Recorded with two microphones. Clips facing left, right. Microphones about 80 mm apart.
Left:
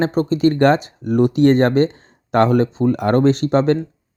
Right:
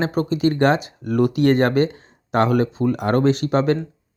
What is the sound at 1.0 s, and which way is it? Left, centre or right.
Speech, left.